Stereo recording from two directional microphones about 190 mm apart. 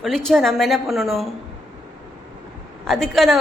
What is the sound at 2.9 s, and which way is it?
Speech, centre (ahead or behind).